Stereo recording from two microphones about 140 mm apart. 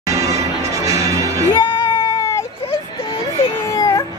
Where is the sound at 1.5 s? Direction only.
30° left (ahead or behind).